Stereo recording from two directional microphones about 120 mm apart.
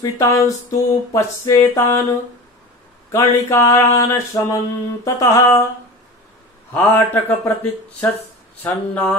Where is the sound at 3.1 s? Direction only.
25° left (ahead or behind).